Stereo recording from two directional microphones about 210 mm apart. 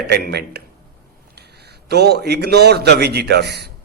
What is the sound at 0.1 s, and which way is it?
A man's voice, 50° right (ahead or behind).